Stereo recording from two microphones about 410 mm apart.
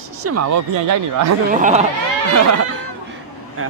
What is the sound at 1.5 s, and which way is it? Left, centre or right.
Speech, centre.